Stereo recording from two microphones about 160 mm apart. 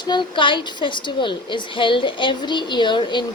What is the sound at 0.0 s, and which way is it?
A woman's voice, 30° left (ahead or behind).